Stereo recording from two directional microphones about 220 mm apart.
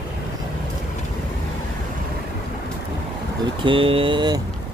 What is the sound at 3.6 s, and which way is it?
Speech, 25° right (ahead or behind).